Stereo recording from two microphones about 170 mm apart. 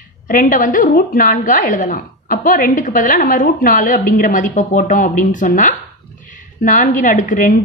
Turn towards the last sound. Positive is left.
turn(degrees=50)  # may be behind; listen again after turning